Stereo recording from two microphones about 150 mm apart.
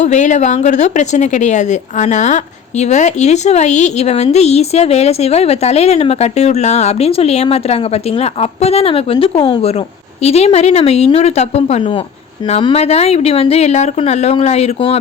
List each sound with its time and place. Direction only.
0.0 s speech: 55° left (ahead or behind)